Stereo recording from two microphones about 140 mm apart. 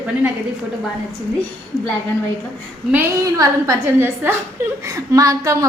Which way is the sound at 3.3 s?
25° right (ahead or behind).